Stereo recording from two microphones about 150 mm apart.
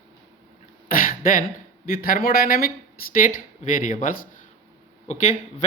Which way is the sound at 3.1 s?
65° left (ahead or behind).